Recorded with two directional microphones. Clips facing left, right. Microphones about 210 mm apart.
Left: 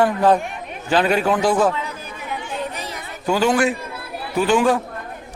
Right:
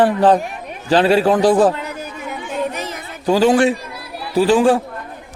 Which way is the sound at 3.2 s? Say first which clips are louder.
Right 5 dB; 30° right (ahead or behind).